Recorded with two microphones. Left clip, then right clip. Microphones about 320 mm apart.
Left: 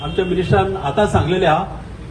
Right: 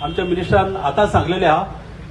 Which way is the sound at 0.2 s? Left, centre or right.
Right.